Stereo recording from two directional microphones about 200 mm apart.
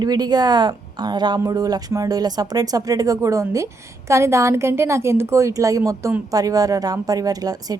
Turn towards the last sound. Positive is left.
turn(degrees=-20)  # may be behind; listen again after turning